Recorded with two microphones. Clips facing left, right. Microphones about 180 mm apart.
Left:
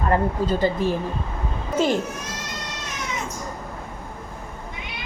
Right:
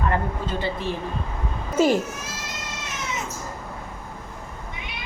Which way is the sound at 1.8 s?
5° right (ahead or behind).